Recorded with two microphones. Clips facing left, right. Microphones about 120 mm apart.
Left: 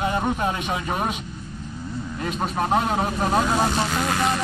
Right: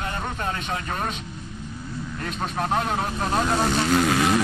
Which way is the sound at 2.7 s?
5° left (ahead or behind).